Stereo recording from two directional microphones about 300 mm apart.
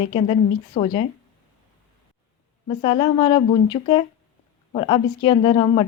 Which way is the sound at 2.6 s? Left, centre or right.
Centre.